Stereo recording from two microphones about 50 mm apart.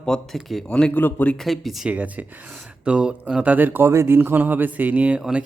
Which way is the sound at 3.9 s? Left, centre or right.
Right.